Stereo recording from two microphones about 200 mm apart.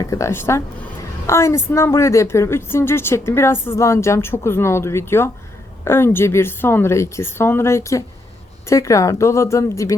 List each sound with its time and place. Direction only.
0.0 s a woman's voice: 15° left (ahead or behind)